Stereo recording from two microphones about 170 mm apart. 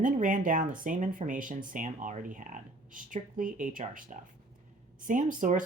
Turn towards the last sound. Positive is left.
turn(degrees=-50)  # may be behind; listen again after turning